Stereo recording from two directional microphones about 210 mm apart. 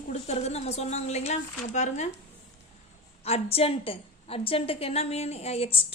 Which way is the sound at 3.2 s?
30° left (ahead or behind).